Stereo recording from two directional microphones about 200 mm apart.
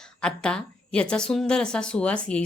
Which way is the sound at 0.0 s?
5° left (ahead or behind).